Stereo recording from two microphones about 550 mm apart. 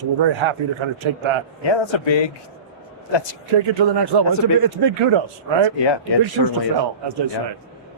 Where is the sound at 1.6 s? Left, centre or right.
Left.